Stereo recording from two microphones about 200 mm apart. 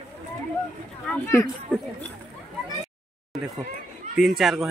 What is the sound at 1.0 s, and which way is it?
Speech, 10° left (ahead or behind).